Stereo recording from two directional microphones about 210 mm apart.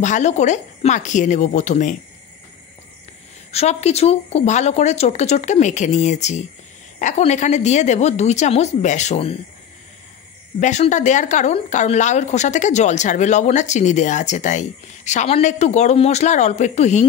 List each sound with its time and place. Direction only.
0.0 s speech: 35° left (ahead or behind)
3.5 s speech: 30° left (ahead or behind)
10.6 s speech: 35° left (ahead or behind)